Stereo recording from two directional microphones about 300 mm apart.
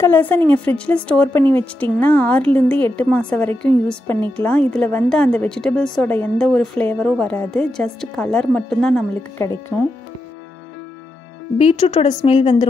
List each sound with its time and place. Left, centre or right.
0.0 s a woman's voice: centre
11.5 s a woman's voice: centre